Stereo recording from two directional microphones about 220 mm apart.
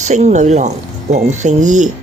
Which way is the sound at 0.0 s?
30° right (ahead or behind).